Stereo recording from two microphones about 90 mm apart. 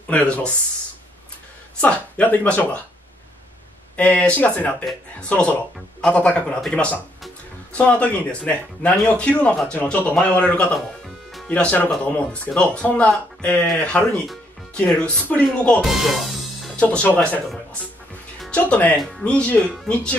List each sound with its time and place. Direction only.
1.8 s speech: 15° left (ahead or behind)
3.9 s speech: 15° left (ahead or behind)
15.8 s music: centre (ahead or behind)
16.8 s speech: 20° left (ahead or behind)
18.5 s speech: 15° left (ahead or behind)